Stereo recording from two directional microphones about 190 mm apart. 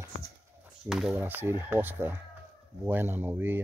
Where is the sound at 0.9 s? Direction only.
Centre (ahead or behind).